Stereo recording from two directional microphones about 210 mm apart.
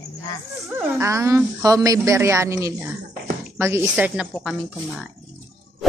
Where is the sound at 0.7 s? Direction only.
15° right (ahead or behind).